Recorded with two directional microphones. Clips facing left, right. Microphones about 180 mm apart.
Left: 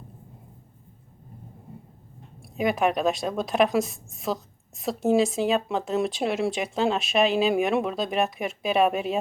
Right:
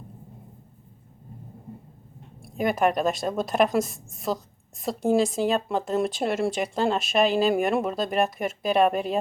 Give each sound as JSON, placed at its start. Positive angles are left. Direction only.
{"t": 2.4, "sound": "a woman's voice", "side_deg": 0}